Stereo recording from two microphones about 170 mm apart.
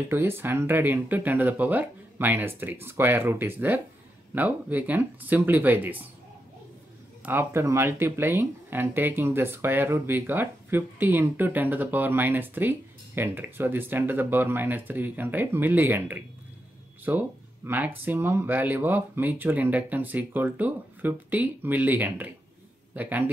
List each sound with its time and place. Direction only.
0.1 s speech: 15° right (ahead or behind)
7.2 s speech: 15° right (ahead or behind)